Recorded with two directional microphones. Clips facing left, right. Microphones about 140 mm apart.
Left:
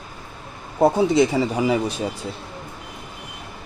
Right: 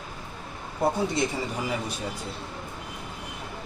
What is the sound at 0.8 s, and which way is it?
Speech, 85° left.